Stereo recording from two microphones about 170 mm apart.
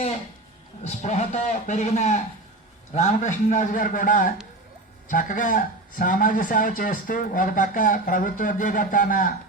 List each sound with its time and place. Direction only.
0.9 s speech: 40° left (ahead or behind)